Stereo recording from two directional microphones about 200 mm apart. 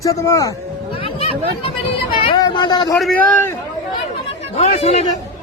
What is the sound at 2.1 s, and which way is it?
Vehicle, 25° left (ahead or behind).